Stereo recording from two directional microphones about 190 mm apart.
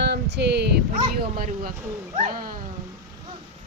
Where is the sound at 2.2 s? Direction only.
45° right (ahead or behind).